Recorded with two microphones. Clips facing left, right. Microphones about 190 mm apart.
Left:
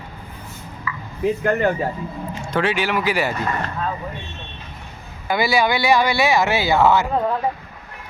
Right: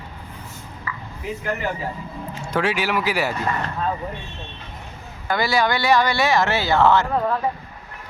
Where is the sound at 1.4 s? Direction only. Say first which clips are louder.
Left 6 dB; 55° left (ahead or behind).